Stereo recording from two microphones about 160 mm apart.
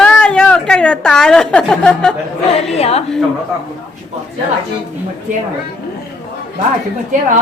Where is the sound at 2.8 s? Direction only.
40° left (ahead or behind).